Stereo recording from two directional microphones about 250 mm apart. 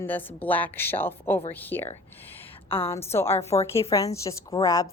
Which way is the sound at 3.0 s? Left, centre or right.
Centre.